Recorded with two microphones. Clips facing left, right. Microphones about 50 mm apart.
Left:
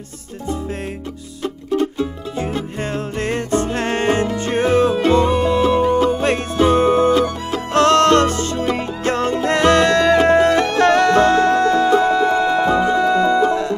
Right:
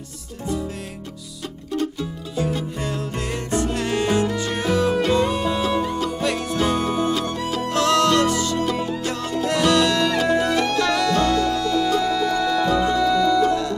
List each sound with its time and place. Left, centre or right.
1.4 s music: left